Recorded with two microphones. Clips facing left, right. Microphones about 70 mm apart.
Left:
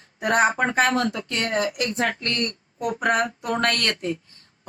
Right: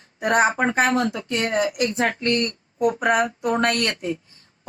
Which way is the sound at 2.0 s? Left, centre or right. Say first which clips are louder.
Right 4 dB; right.